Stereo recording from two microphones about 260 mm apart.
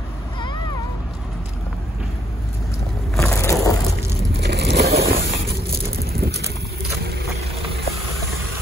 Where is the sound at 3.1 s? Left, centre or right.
Centre.